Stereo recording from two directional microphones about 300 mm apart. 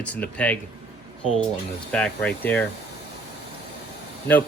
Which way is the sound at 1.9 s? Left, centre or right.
Centre.